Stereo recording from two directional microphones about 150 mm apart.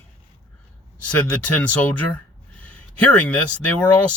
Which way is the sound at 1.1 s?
10° left (ahead or behind).